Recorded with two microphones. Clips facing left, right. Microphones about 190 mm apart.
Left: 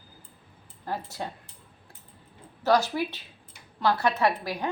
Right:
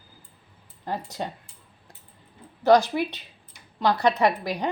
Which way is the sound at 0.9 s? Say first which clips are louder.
Right 3 dB; 20° right (ahead or behind).